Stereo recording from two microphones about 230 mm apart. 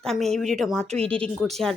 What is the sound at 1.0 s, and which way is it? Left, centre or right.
Speech, right.